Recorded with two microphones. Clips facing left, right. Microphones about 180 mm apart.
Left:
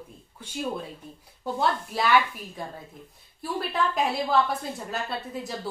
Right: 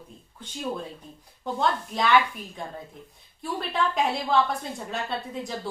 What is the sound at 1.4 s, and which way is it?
A woman's voice, 5° left (ahead or behind).